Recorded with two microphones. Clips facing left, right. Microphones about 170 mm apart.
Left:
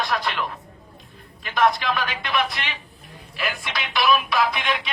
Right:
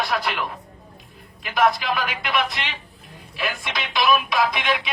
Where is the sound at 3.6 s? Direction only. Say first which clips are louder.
Even; 20° right (ahead or behind).